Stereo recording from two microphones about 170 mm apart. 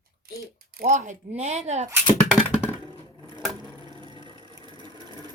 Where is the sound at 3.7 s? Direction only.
25° right (ahead or behind).